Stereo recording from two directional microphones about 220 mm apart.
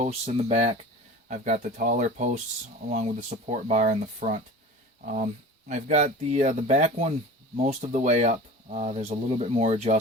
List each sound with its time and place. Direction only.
0.0 s speech: 30° right (ahead or behind)